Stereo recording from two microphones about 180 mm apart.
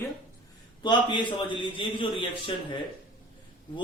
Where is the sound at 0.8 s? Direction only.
25° left (ahead or behind).